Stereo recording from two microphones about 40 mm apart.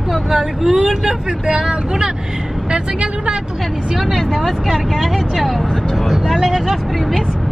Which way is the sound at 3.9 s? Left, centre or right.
Centre.